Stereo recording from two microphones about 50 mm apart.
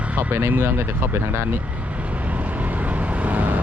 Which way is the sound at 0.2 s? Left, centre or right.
Right.